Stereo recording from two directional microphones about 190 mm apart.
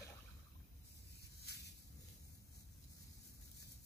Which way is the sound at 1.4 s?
60° left (ahead or behind).